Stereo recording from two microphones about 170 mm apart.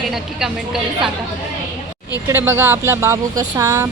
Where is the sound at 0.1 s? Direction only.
Centre (ahead or behind).